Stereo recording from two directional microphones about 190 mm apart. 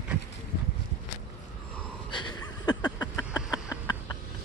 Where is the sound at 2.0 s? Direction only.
20° left (ahead or behind).